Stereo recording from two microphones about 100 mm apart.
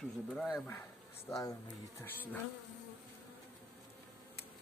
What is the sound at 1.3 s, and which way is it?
Speech, 30° left (ahead or behind).